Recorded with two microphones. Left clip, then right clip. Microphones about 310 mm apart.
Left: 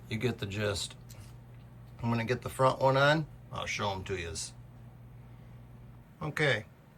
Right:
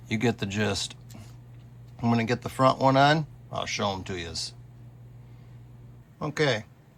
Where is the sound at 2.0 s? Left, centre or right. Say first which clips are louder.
Right 6 dB; centre.